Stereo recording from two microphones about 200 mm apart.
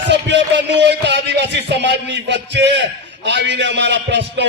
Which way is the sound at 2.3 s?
60° right (ahead or behind).